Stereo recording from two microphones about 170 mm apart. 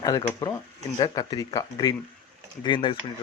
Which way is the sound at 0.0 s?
20° left (ahead or behind).